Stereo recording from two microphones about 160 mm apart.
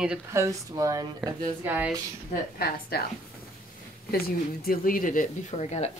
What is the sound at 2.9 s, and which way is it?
Speech, 75° left (ahead or behind).